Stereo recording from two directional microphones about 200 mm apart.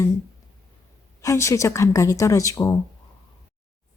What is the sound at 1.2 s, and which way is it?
Speech, 15° left (ahead or behind).